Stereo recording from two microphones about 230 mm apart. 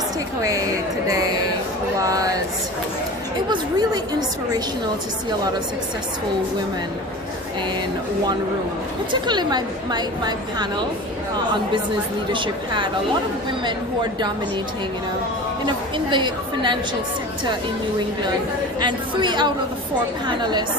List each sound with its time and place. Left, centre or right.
2.0 s speech: centre
3.5 s speech: centre
9.2 s speech: centre
12.3 s a woman's voice: right
15.6 s a woman's voice: centre
18.8 s a woman's voice: centre